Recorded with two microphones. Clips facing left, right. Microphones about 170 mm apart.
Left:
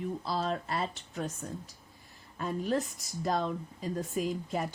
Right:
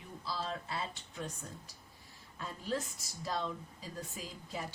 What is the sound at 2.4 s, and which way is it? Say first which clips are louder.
Speech: left 7 dB; 55° left (ahead or behind).